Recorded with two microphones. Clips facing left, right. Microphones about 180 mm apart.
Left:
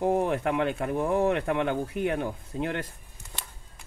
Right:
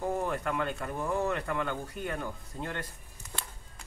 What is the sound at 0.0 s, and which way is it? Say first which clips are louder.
Speech: left 7 dB; 60° left (ahead or behind).